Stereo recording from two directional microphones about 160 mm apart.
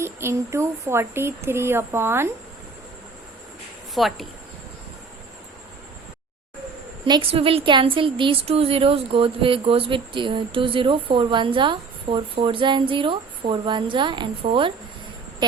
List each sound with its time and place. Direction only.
0.0 s speech: 15° right (ahead or behind)
3.9 s speech: centre (ahead or behind)
7.0 s a woman's voice: 35° right (ahead or behind)